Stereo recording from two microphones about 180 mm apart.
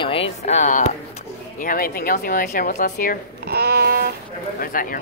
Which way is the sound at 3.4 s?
60° right (ahead or behind).